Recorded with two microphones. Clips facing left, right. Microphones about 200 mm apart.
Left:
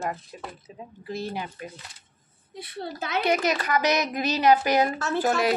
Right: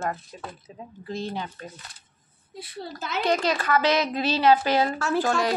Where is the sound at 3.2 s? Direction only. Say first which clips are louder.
Right 1 dB; 10° left (ahead or behind).